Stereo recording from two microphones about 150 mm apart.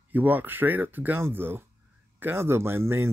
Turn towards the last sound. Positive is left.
turn(degrees=-15)  # may be behind; listen again after turning